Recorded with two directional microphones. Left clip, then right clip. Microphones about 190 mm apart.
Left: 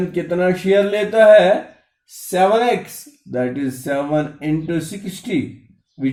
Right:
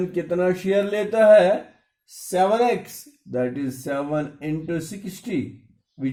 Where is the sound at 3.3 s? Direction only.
20° right (ahead or behind).